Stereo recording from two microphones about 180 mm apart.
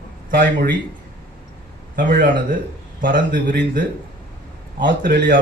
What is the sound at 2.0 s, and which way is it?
Speech, 50° right (ahead or behind).